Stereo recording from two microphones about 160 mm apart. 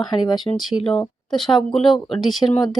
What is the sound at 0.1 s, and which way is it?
A woman's voice, 30° left (ahead or behind).